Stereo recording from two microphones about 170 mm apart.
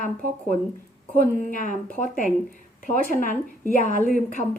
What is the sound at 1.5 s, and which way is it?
A woman's voice, 50° left (ahead or behind).